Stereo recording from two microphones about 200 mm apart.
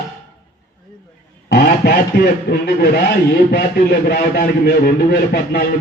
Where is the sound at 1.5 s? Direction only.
50° left (ahead or behind).